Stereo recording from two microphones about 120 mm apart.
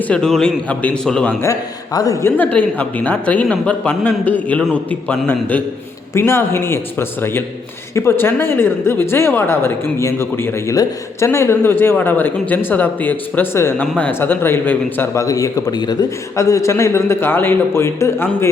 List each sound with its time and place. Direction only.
0.1 s speech: 5° left (ahead or behind)
1.4 s a man's voice: 30° left (ahead or behind)
2.2 s speech: 15° left (ahead or behind)